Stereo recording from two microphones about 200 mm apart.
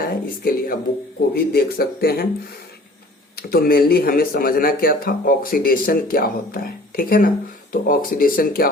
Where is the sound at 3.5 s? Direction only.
50° left (ahead or behind).